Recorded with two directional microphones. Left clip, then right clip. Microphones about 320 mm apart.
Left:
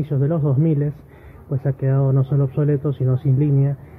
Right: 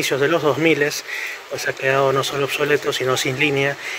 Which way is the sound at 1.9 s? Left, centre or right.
Centre.